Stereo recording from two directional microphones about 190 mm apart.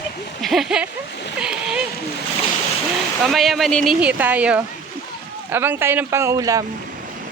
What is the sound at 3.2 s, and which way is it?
Speech, centre (ahead or behind).